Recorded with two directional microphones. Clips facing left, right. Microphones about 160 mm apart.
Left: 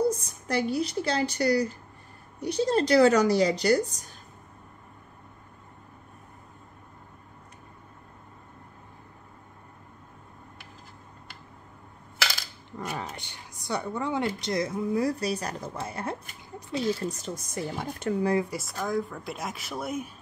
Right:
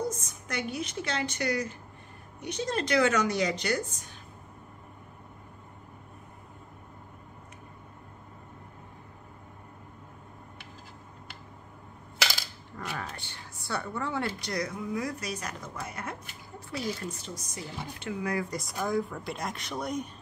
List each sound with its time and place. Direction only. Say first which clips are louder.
0.0 s a woman's voice: left 7 dB; 35° left (ahead or behind)
12.9 s speech: left 2 dB; 20° left (ahead or behind)
17.1 s speech: left 6 dB; 50° left (ahead or behind)
18.4 s speech: left 1 dB; 5° left (ahead or behind)